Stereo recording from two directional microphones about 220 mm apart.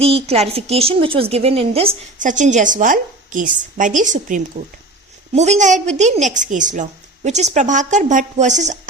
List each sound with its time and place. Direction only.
0.0 s a woman's voice: 25° right (ahead or behind)